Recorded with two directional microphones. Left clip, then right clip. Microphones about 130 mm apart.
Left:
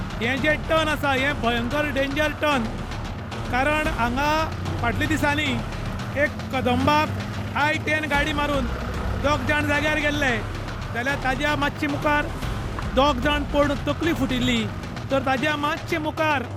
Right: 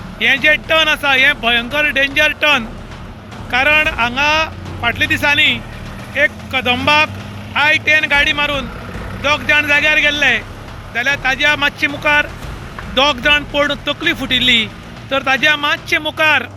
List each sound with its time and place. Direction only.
0.2 s speech: 15° left (ahead or behind)